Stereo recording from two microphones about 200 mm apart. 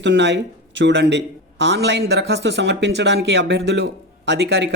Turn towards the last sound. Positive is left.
turn(degrees=-60)  # may be behind; listen again after turning